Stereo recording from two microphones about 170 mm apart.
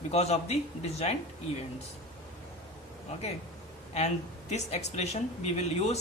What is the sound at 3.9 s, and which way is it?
A woman's voice, 40° left (ahead or behind).